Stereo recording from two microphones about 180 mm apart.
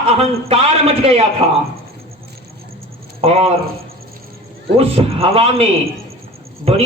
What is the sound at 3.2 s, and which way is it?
Speech, 35° right (ahead or behind).